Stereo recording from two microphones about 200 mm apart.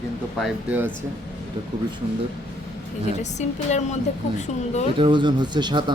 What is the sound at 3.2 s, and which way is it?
Speech, 35° left (ahead or behind).